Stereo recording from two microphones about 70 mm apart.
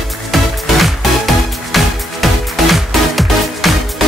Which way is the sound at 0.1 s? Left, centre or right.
Centre.